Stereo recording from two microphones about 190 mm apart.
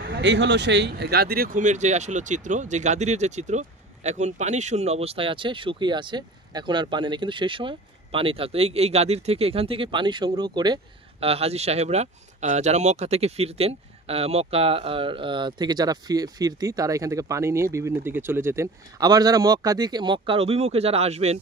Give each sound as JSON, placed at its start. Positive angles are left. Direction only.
{"t": 0.1, "sound": "speech", "side_deg": -70}